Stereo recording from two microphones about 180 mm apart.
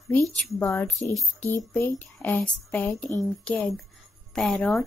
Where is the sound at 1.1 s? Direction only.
5° left (ahead or behind).